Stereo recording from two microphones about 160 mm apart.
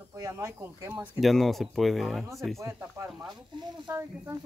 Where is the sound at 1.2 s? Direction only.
Centre (ahead or behind).